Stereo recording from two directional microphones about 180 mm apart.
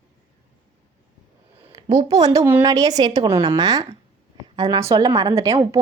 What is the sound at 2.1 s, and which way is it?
A woman's voice, 20° right (ahead or behind).